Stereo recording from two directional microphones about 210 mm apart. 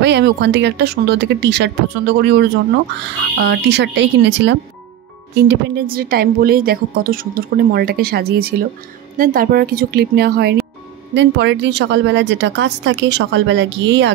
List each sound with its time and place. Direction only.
0.0 s a woman's voice: 55° right (ahead or behind)